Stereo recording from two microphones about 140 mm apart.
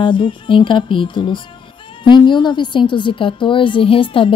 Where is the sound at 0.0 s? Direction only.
35° left (ahead or behind).